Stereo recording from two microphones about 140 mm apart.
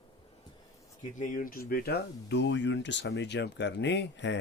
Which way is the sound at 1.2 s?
90° left.